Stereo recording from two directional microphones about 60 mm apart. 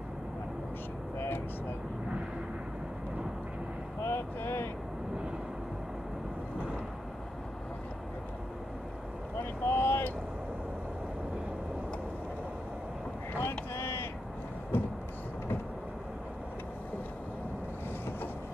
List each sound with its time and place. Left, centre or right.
4.0 s a sound: left
9.4 s vehicle: left
13.4 s vehicle: left